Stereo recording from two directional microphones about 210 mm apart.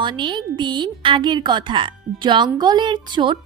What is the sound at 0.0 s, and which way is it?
A woman's voice, 20° right (ahead or behind).